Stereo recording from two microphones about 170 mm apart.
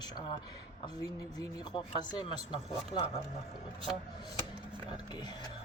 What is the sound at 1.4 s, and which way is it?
Speech, 25° left (ahead or behind).